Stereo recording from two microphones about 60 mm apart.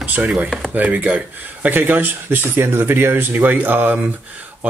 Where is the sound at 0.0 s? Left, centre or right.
Right.